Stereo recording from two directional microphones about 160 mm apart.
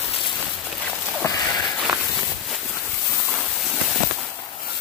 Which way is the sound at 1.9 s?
5° right (ahead or behind).